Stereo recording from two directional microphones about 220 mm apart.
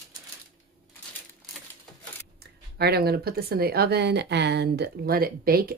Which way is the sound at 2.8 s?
45° right (ahead or behind).